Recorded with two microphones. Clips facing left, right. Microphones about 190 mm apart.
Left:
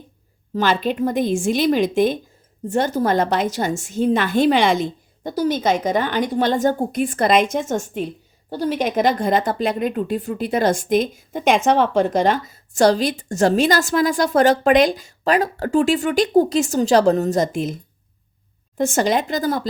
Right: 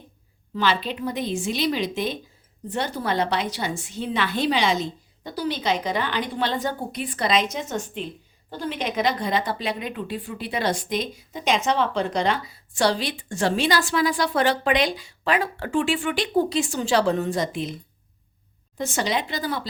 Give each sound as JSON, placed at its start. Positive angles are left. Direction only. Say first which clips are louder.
{"t": 0.5, "sound": "a woman's voice", "louder": "left 5 dB", "side_deg": 45}
{"t": 18.8, "sound": "a woman's voice", "louder": "left 7 dB", "side_deg": 45}